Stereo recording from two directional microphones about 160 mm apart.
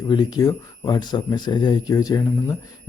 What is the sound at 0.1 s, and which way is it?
Speech, 25° left (ahead or behind).